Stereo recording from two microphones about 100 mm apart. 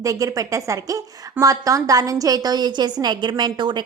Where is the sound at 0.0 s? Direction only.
35° right (ahead or behind).